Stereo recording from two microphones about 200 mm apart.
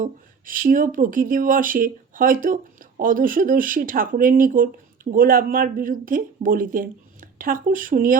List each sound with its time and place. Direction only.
0.0 s speech: 45° right (ahead or behind)